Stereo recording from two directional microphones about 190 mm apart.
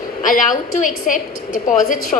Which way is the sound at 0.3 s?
45° left (ahead or behind).